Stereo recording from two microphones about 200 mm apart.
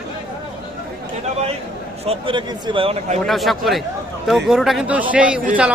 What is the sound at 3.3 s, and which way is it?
A man's voice, centre (ahead or behind).